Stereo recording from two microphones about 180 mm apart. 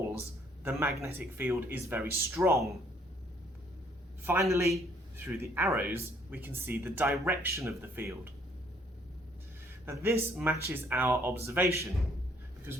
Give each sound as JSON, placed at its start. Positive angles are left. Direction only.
{"t": 0.6, "sound": "a man's voice", "side_deg": -10}
{"t": 4.2, "sound": "a man's voice", "side_deg": -15}
{"t": 9.8, "sound": "a man's voice", "side_deg": -15}